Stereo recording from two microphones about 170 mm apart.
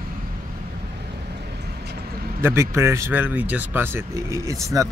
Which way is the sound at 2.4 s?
15° right (ahead or behind).